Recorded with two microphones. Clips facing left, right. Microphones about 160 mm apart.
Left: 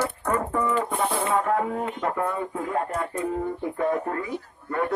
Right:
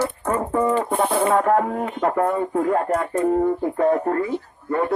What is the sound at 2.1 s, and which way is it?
Speech, 45° right (ahead or behind).